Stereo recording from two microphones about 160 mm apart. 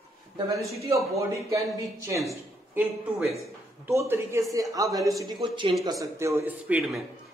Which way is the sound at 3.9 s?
15° right (ahead or behind).